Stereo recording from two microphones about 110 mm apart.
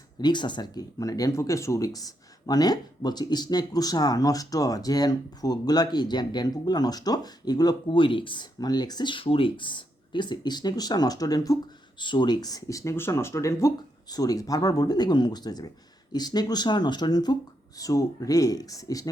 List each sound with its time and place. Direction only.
0.2 s speech: 45° left (ahead or behind)
7.9 s speech: 50° left (ahead or behind); by 11.5 s 35° left (ahead or behind)
11.9 s speech: 45° left (ahead or behind)